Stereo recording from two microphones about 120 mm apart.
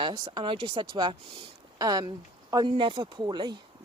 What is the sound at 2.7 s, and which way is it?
Speech, 45° right (ahead or behind).